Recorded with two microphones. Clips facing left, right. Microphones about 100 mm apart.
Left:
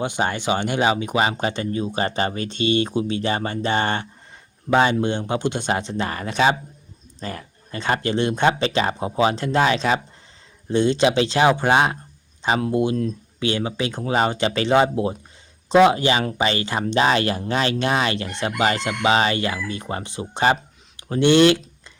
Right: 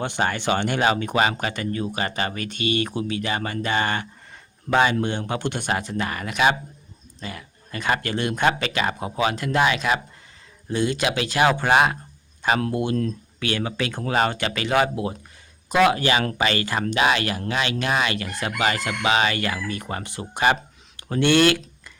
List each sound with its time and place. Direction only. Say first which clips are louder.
0.0 s speech: left 1 dB; 15° left (ahead or behind)
4.9 s speech: left 3 dB; 20° left (ahead or behind)
7.2 s chicken: left 4 dB; 40° left (ahead or behind)
7.7 s speech: left 2 dB; 30° left (ahead or behind)
16.9 s chicken: left 3 dB; 35° left (ahead or behind)
19.6 s speech: left 1 dB; 25° left (ahead or behind)
20.9 s a sound: left 3 dB; 20° left (ahead or behind)